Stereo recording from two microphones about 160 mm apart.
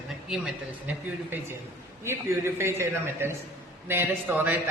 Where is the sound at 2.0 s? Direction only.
15° right (ahead or behind).